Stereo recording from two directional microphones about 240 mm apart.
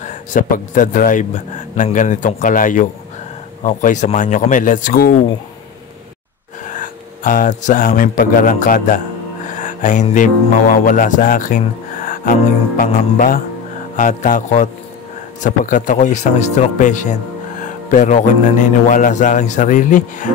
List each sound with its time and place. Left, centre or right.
0.0 s speech: left
6.6 s speech: left
9.5 s music: left
10.9 s speech: left